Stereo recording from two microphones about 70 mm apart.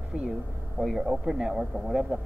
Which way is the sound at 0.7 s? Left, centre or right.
Centre.